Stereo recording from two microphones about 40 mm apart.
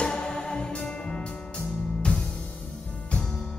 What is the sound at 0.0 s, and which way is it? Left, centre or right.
Music, left.